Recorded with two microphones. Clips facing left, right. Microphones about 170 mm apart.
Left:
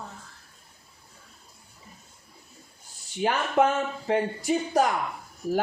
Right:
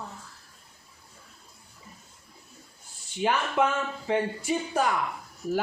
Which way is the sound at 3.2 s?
45° left (ahead or behind).